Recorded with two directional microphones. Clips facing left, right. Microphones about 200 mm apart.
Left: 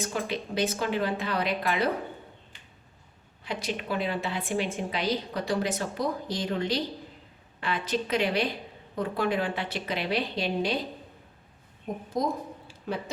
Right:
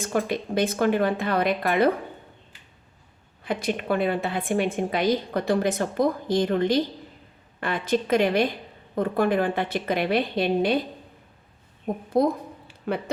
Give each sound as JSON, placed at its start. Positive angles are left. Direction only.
{"t": 0.0, "sound": "a woman's voice", "side_deg": -55}
{"t": 3.4, "sound": "a woman's voice", "side_deg": -55}
{"t": 12.1, "sound": "a sound", "side_deg": -60}